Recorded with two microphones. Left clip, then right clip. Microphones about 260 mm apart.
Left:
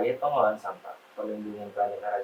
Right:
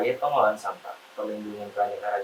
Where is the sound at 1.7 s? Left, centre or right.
Centre.